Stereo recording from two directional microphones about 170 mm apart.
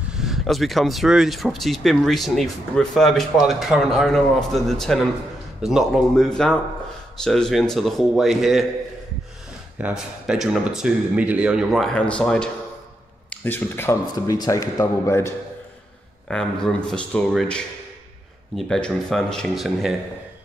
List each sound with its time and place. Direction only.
0.1 s speech: centre (ahead or behind)
9.8 s a man's voice: 5° right (ahead or behind); by 15.3 s 15° left (ahead or behind)
16.3 s speech: 5° left (ahead or behind)